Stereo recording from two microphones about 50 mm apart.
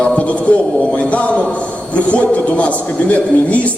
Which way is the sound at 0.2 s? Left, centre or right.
Left.